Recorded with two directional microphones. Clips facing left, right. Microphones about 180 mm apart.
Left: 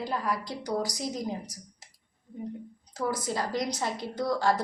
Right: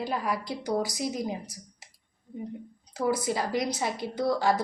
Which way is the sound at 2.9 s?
10° right (ahead or behind).